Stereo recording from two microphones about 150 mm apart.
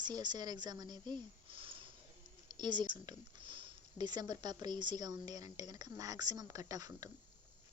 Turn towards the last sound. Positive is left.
turn(degrees=-25)  # may be behind; listen again after turning